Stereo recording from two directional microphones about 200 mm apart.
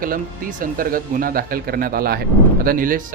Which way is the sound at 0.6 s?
45° right (ahead or behind).